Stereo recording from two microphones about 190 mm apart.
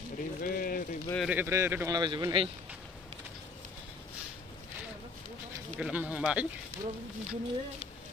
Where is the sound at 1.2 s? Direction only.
10° right (ahead or behind); by 2.5 s 25° right (ahead or behind).